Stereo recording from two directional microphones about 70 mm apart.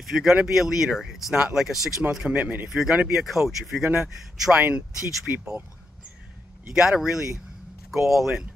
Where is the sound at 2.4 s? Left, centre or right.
Right.